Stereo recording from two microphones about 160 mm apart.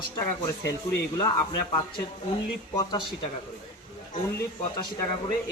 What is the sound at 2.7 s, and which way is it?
Speech, 30° left (ahead or behind).